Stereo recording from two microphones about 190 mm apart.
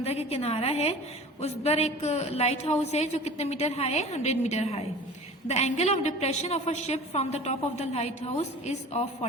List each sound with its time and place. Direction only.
0.0 s a woman's voice: 35° left (ahead or behind)